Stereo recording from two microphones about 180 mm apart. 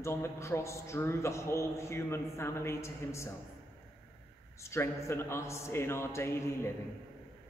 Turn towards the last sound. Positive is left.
turn(degrees=15)  # may be behind; listen again after turning